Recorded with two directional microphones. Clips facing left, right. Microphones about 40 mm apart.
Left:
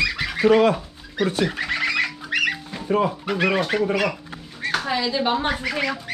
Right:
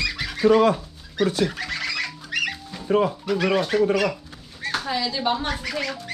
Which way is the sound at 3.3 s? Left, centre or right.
Left.